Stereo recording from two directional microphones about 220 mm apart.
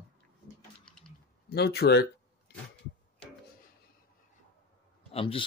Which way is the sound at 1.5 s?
45° left (ahead or behind).